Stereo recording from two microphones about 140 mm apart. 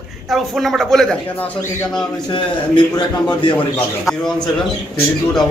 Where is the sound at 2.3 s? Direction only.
35° left (ahead or behind).